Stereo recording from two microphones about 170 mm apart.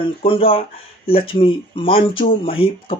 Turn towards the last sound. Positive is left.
turn(degrees=30)  # may be behind; listen again after turning